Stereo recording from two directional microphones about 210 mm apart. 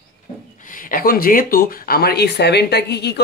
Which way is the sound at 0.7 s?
40° left (ahead or behind).